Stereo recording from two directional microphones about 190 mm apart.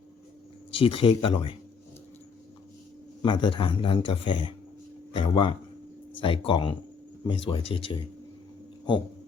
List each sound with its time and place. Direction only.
0.7 s a man's voice: 30° left (ahead or behind)
3.2 s a man's voice: 25° left (ahead or behind)